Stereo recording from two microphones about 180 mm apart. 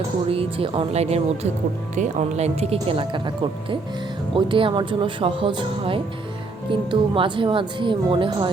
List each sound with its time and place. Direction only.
0.3 s speech: 30° right (ahead or behind)